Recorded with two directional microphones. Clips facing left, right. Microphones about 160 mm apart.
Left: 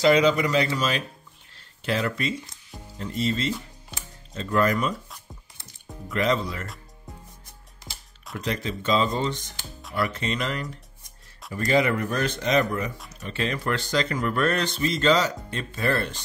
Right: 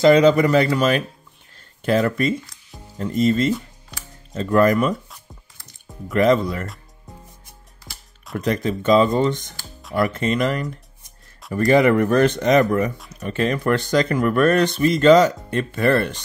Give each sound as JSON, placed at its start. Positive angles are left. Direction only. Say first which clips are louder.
{"t": 0.0, "sound": "speech", "louder": "right 6 dB", "side_deg": -45}
{"t": 6.0, "sound": "speech", "louder": "right 8 dB", "side_deg": -50}
{"t": 8.4, "sound": "speech", "louder": "right 8 dB", "side_deg": -50}